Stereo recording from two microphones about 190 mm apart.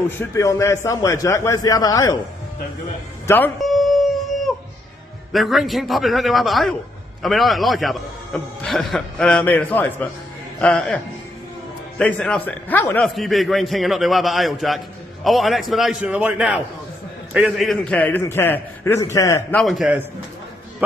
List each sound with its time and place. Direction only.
0.2 s a man's voice: 15° left (ahead or behind)
3.3 s a sound: 10° left (ahead or behind)
5.3 s a man's voice: centre (ahead or behind)
12.0 s a man's voice: 5° left (ahead or behind)
19.5 s a man's voice: centre (ahead or behind)